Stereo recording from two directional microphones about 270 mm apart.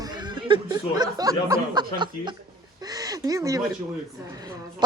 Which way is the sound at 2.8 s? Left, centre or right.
Centre.